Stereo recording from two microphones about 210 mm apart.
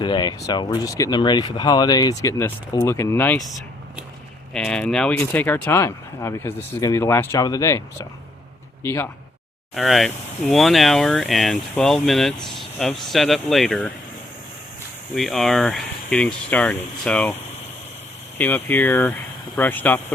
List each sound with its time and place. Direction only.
0.0 s speech: 20° left (ahead or behind)
4.5 s speech: 5° left (ahead or behind)
9.7 s speech: centre (ahead or behind)
15.1 s speech: centre (ahead or behind)
18.3 s speech: 10° left (ahead or behind)